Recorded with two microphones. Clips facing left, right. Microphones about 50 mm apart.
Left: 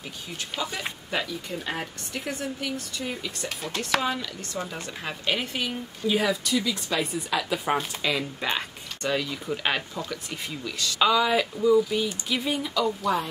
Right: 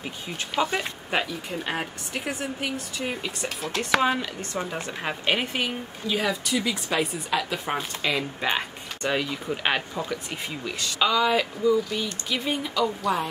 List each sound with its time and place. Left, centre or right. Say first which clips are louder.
0.6 s speech: right 7 dB; right
1.2 s speech: right 2 dB; right
3.4 s speech: right 2 dB; centre
4.0 s speech: right 5 dB; right
6.0 s speech: left 2 dB; centre
6.7 s speech: right 1 dB; centre
7.4 s speech: left 3 dB; centre
8.0 s speech: right 1 dB; centre
11.0 s speech: even; centre
12.4 s speech: right 1 dB; centre